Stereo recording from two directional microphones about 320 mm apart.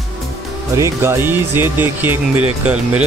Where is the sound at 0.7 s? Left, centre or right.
Centre.